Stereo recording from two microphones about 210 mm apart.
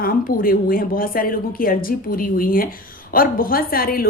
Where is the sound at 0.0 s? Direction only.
45° left (ahead or behind).